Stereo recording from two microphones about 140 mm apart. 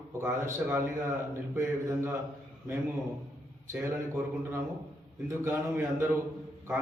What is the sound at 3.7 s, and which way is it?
Speech, 20° right (ahead or behind).